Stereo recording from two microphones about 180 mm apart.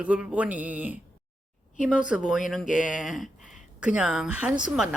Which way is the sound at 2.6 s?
45° left (ahead or behind).